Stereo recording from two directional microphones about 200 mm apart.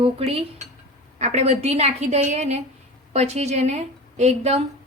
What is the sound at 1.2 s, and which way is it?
A woman's voice, 35° right (ahead or behind).